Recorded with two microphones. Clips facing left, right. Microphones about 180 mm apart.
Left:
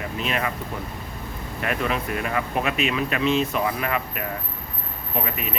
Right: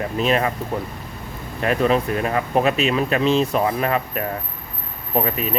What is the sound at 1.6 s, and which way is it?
Speech, 35° right (ahead or behind).